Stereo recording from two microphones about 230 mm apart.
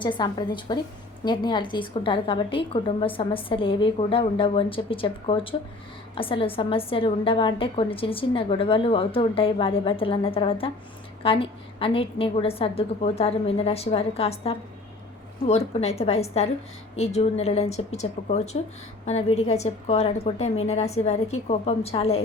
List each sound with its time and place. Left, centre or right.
0.0 s a woman's voice: centre